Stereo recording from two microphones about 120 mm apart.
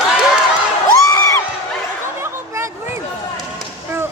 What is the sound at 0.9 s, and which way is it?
Crowd, 30° left (ahead or behind).